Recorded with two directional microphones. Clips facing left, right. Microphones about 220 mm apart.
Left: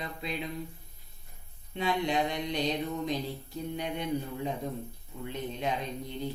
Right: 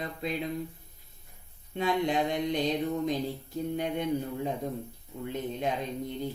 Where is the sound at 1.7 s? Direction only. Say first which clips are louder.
Right 2 dB; 50° right (ahead or behind).